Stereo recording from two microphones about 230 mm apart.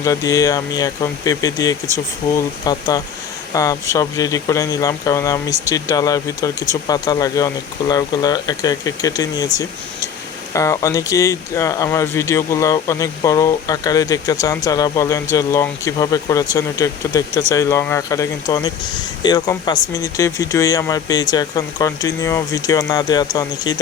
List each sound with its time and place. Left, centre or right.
0.0 s speech: centre